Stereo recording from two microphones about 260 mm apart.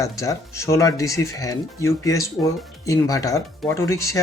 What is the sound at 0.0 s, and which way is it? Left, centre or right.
Speech, centre.